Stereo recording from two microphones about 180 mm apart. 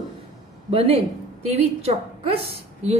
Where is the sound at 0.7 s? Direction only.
30° right (ahead or behind).